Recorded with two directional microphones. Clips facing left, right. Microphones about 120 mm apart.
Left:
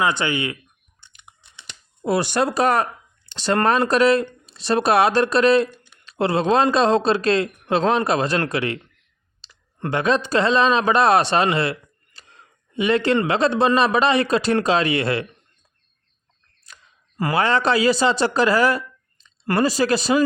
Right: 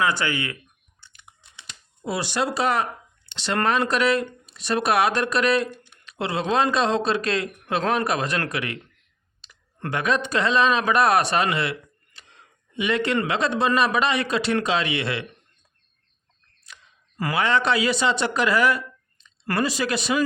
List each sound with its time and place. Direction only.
0.0 s speech: 20° left (ahead or behind)
1.0 s chewing: 20° left (ahead or behind)
2.0 s a man's voice: 55° left (ahead or behind)
16.7 s clicking: 40° left (ahead or behind)
17.2 s a man's voice: 30° left (ahead or behind)